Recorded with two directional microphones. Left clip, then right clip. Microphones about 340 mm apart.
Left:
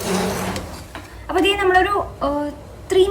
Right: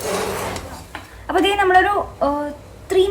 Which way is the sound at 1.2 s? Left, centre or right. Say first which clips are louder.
Right 1 dB; centre.